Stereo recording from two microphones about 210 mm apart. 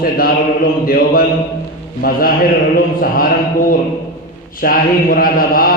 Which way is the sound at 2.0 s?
45° left (ahead or behind).